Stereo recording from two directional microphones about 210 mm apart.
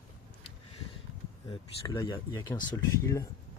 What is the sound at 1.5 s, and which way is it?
Speech, 20° left (ahead or behind).